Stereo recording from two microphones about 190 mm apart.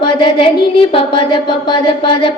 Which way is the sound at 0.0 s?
25° left (ahead or behind).